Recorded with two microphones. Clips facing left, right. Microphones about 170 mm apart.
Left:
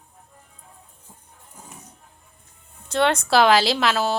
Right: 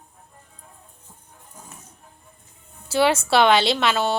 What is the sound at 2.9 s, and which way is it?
A woman's voice, 5° right (ahead or behind).